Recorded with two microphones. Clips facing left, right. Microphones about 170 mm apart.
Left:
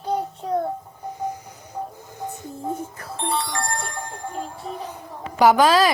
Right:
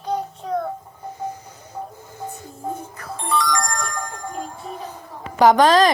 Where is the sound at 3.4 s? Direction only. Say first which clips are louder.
Right 4 dB; 90° right.